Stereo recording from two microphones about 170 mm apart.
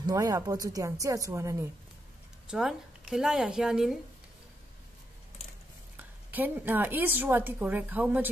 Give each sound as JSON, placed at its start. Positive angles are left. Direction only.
{"t": 0.0, "sound": "speech", "side_deg": -20}
{"t": 2.5, "sound": "a woman's voice", "side_deg": -5}
{"t": 6.3, "sound": "a woman's voice", "side_deg": -10}